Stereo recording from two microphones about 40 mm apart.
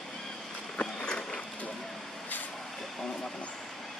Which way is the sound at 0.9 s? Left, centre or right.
Centre.